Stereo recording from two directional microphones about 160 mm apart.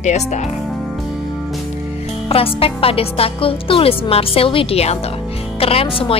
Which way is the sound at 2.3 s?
35° left (ahead or behind).